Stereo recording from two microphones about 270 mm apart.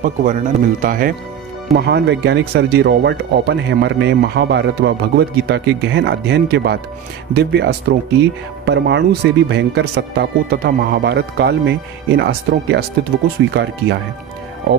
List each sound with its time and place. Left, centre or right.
0.0 s speech: right